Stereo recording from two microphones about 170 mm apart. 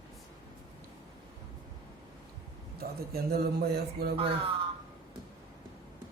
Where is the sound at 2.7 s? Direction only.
65° right (ahead or behind).